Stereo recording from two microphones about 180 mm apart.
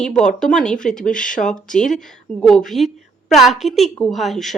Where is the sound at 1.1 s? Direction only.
45° left (ahead or behind).